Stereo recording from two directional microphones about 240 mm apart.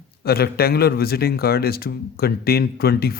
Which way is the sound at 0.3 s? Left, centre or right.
Left.